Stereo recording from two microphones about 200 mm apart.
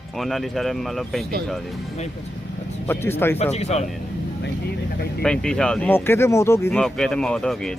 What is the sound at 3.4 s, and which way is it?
Speech, 30° left (ahead or behind).